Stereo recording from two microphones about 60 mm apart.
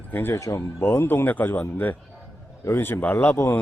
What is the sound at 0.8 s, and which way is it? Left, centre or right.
Speech, left.